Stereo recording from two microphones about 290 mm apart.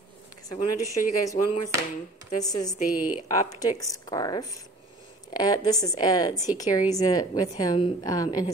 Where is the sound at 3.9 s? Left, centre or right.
Centre.